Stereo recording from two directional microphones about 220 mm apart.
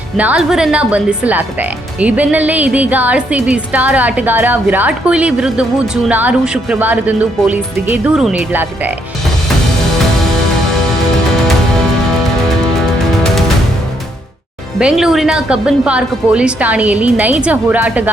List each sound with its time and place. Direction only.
0.2 s speech: 5° right (ahead or behind)
12.8 s music: centre (ahead or behind)
14.8 s a woman's voice: 5° right (ahead or behind)